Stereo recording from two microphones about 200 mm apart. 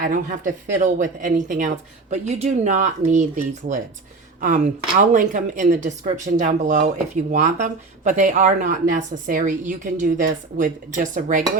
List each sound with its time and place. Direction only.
0.0 s speech: 40° right (ahead or behind)